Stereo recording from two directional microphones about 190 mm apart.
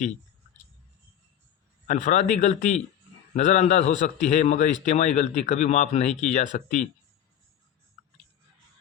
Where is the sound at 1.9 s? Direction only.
40° left (ahead or behind).